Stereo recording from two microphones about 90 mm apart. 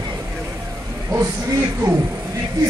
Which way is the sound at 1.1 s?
35° right (ahead or behind).